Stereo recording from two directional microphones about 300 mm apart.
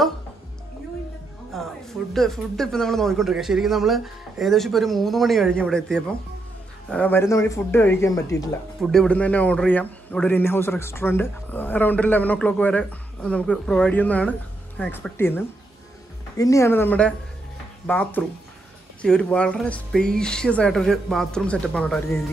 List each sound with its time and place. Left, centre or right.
1.5 s music: centre
2.1 s a man's voice: centre